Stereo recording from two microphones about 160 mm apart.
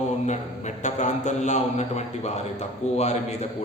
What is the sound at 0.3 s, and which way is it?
Speech, 50° left (ahead or behind).